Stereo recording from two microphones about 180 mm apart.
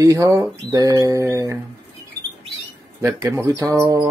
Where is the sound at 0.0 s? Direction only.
20° right (ahead or behind).